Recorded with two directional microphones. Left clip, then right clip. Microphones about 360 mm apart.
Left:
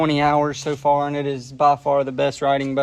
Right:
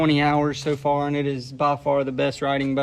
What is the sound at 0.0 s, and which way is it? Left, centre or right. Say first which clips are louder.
Speech: left 2 dB; centre.